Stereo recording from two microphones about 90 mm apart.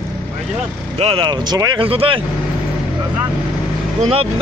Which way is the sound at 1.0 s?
90° right.